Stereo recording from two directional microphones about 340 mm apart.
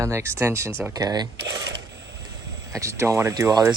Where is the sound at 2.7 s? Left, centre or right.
Centre.